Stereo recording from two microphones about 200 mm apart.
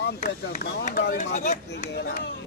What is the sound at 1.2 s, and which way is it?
Speech, 40° left (ahead or behind).